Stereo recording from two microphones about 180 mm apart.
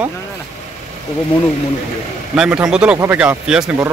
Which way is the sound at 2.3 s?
5° right (ahead or behind).